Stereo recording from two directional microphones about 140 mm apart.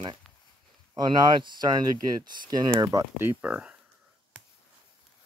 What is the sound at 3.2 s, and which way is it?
Speech, 10° right (ahead or behind).